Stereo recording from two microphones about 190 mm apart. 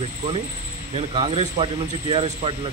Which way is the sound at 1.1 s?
30° right (ahead or behind).